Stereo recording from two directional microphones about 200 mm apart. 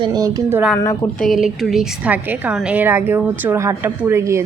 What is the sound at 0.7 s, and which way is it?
Speech, 15° left (ahead or behind).